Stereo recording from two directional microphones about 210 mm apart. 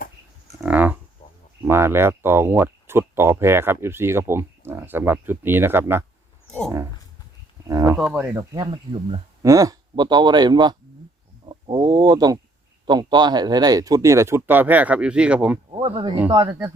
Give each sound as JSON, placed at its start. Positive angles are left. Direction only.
{"t": 0.6, "sound": "a sound", "side_deg": -10}
{"t": 1.6, "sound": "speech", "side_deg": -10}
{"t": 7.7, "sound": "speech", "side_deg": -15}
{"t": 7.9, "sound": "speech", "side_deg": -5}
{"t": 8.5, "sound": "speech", "side_deg": -20}
{"t": 9.4, "sound": "speech", "side_deg": -15}
{"t": 15.7, "sound": "speech", "side_deg": -25}